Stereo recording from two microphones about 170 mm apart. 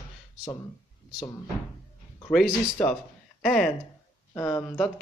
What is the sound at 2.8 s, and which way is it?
A man's voice, 5° left (ahead or behind).